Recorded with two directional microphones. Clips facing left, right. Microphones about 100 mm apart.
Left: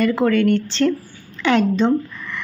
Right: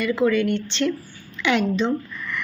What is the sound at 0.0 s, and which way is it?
A woman's voice, 50° left (ahead or behind).